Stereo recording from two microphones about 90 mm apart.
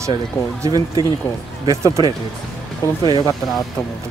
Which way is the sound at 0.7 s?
45° right (ahead or behind).